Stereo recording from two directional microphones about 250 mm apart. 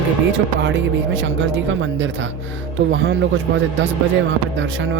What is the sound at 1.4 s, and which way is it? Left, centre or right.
Speech, right.